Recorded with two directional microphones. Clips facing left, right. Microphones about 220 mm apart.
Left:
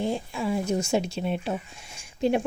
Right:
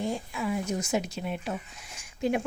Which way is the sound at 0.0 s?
30° left (ahead or behind).